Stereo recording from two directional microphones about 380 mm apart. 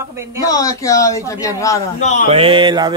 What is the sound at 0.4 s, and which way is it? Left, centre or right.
A man's voice, centre.